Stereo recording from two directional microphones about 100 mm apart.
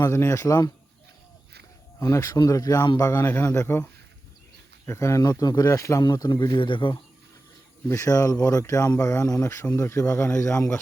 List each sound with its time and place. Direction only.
0.1 s speech: 30° left (ahead or behind)
2.0 s speech: 30° left (ahead or behind)
4.9 s speech: 30° left (ahead or behind)
6.5 s speech: 55° left (ahead or behind)
7.9 s speech: 35° left (ahead or behind)